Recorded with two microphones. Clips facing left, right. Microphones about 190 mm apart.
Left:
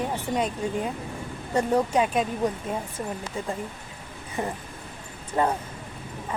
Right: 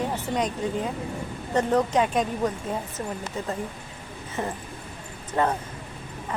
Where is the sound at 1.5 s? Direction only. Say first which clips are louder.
Even; 10° left (ahead or behind).